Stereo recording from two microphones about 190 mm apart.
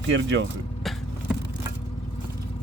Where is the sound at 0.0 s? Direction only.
75° right (ahead or behind).